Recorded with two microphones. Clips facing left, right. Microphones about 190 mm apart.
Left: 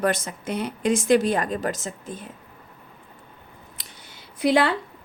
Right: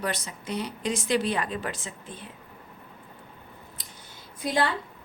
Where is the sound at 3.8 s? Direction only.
75° left (ahead or behind).